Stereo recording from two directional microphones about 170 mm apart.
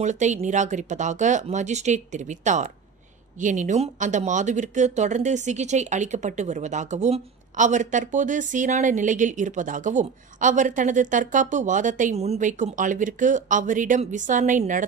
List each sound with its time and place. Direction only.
0.0 s speech: 45° right (ahead or behind)